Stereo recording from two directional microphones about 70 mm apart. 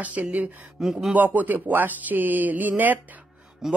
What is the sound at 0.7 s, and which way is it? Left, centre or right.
Speech, centre.